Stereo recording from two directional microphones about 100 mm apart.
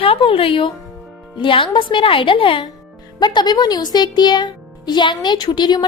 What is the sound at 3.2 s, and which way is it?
Speech, 45° left (ahead or behind).